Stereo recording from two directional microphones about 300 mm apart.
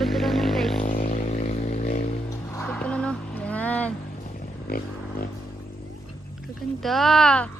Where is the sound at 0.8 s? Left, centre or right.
Left.